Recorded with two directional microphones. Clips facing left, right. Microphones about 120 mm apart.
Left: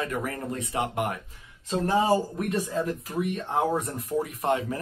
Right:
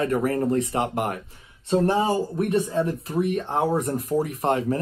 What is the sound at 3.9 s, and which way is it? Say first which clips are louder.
Speech: right 5 dB; 40° right (ahead or behind).